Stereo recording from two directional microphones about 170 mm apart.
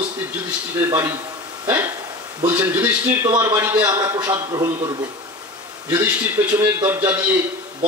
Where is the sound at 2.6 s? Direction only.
10° right (ahead or behind).